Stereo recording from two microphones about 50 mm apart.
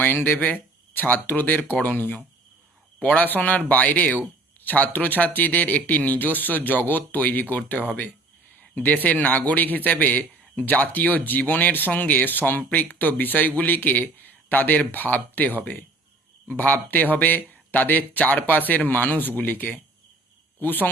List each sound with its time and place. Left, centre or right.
0.0 s speech: left
8.7 s speech: left